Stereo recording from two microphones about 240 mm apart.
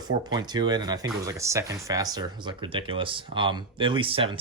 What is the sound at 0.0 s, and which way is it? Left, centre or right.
Speech, centre.